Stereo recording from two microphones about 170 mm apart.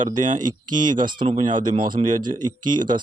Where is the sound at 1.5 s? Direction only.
50° right (ahead or behind).